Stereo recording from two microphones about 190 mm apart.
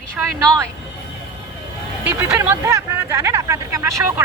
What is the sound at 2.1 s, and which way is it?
Speech, 15° right (ahead or behind).